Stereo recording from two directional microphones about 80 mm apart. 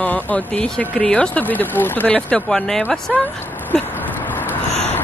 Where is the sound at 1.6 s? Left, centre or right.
Left.